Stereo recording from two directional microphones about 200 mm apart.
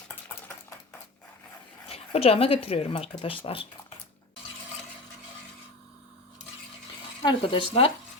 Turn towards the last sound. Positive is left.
turn(degrees=30)  # may be behind; listen again after turning